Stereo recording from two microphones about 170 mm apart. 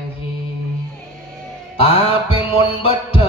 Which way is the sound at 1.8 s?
35° left (ahead or behind).